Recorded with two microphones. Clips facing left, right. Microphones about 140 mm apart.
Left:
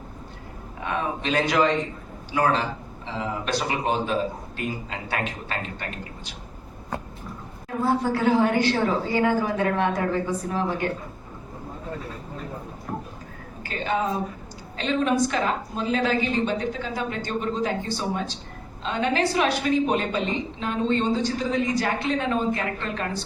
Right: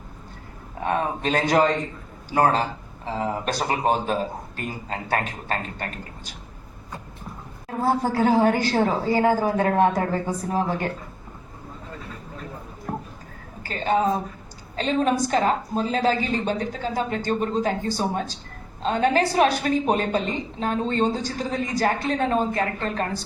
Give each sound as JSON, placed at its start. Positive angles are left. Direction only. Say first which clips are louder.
{"t": 0.9, "sound": "a man's voice", "louder": "right 3 dB", "side_deg": -40}
{"t": 7.9, "sound": "a woman's voice", "louder": "right 1 dB", "side_deg": -40}
{"t": 13.7, "sound": "a woman's voice", "louder": "right 4 dB", "side_deg": -40}